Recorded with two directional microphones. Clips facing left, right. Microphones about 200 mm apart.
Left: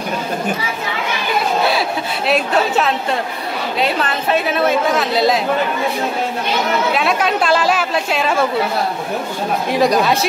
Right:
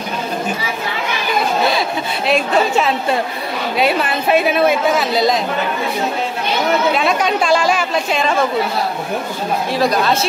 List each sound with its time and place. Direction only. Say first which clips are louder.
1.7 s a sound: even; 5° left (ahead or behind)
3.7 s a woman's voice: right 3 dB; 10° right (ahead or behind)
4.9 s a woman's voice: even; 5° left (ahead or behind)
7.0 s a woman's voice: right 1 dB; 5° left (ahead or behind)
9.7 s a woman's voice: left 2 dB; 15° left (ahead or behind)